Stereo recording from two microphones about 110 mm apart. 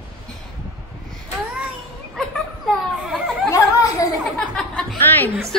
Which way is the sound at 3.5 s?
30° left (ahead or behind).